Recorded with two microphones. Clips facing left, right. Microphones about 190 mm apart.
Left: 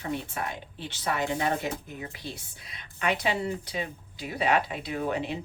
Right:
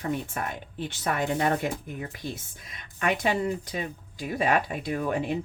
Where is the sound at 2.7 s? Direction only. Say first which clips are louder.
Right 1 dB; 45° right (ahead or behind).